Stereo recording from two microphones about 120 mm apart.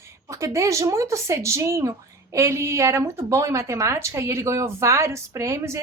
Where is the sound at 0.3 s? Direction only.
25° right (ahead or behind).